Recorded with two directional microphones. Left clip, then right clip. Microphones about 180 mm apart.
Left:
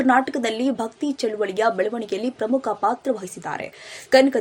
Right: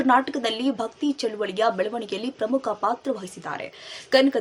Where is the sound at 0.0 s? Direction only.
10° left (ahead or behind).